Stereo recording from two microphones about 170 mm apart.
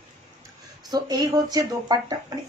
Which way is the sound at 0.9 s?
20° right (ahead or behind).